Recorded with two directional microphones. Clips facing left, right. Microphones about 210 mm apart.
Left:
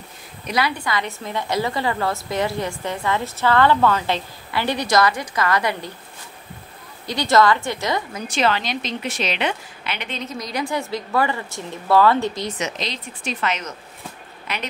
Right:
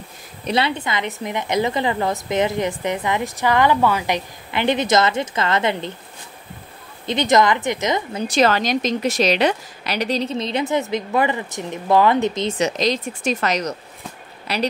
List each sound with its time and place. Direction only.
0.5 s a woman's voice: 25° right (ahead or behind)
7.1 s a woman's voice: 20° right (ahead or behind)
8.3 s a woman's voice: 40° right (ahead or behind); by 12.5 s 20° right (ahead or behind)
12.5 s speech: 40° right (ahead or behind)